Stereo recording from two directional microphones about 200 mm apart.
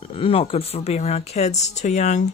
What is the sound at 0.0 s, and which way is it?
Speech, 25° left (ahead or behind).